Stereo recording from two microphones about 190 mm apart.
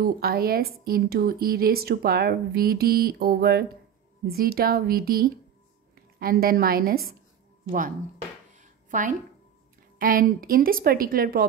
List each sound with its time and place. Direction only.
0.0 s a woman's voice: 50° right (ahead or behind)
8.5 s a sound: 40° right (ahead or behind)
9.9 s a woman's voice: 50° right (ahead or behind)